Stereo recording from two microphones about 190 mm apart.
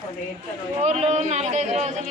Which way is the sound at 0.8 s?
35° right (ahead or behind).